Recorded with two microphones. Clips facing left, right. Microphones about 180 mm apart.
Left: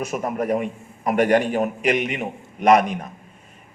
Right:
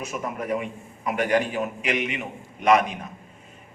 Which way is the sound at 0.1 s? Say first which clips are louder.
Left 4 dB; 40° left (ahead or behind).